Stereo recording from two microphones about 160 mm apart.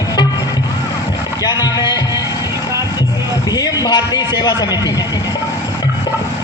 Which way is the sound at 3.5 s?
25° left (ahead or behind).